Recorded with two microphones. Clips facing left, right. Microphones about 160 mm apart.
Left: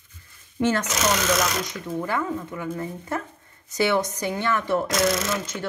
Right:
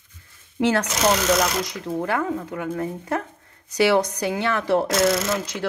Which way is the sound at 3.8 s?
75° right (ahead or behind).